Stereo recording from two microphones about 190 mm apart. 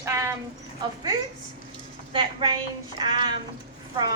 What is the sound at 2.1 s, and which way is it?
A woman's voice, 25° right (ahead or behind).